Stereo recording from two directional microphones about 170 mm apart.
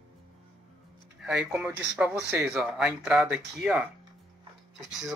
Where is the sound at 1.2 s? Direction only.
5° right (ahead or behind).